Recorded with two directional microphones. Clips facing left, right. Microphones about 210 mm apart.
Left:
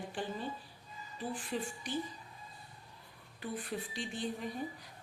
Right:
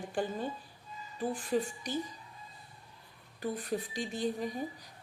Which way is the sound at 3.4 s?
40° right (ahead or behind).